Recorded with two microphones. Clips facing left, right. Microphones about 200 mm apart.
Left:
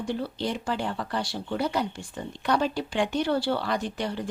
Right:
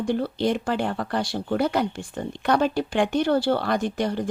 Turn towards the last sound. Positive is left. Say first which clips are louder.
# right 5 dB
turn(degrees=-45)  # may be behind; listen again after turning